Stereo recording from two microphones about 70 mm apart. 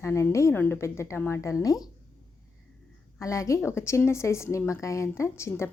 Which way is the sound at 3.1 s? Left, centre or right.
Left.